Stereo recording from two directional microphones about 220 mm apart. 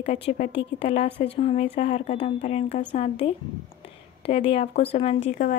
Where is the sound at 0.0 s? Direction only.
30° left (ahead or behind).